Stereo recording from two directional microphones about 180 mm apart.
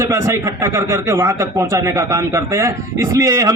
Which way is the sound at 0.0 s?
15° right (ahead or behind).